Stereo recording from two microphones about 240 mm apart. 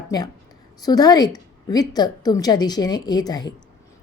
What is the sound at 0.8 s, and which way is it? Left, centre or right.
A woman's voice, centre.